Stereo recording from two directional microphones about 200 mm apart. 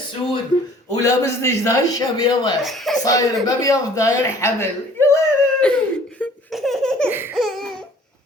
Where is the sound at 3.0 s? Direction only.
20° left (ahead or behind).